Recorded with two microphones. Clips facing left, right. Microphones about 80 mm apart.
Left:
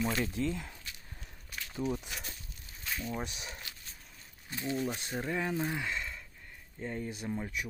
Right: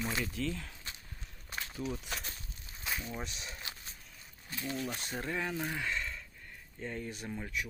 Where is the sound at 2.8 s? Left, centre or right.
Centre.